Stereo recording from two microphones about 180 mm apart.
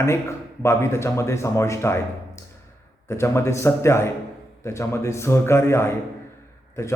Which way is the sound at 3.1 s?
15° left (ahead or behind).